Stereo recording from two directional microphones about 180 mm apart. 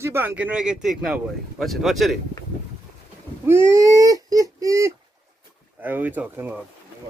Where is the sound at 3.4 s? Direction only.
15° right (ahead or behind).